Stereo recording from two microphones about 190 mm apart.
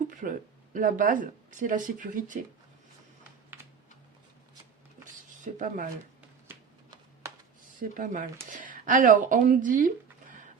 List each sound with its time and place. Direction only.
0.1 s speech: 45° right (ahead or behind)
5.5 s speech: 40° right (ahead or behind)
7.8 s speech: 45° right (ahead or behind)